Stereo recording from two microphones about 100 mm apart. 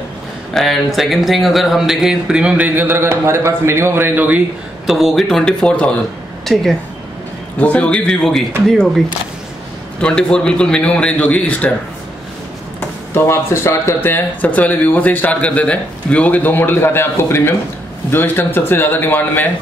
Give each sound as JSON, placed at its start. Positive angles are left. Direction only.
{"t": 0.6, "sound": "speech", "side_deg": 0}
{"t": 4.8, "sound": "a man's voice", "side_deg": 0}
{"t": 10.0, "sound": "a man's voice", "side_deg": 10}
{"t": 13.1, "sound": "speech", "side_deg": 25}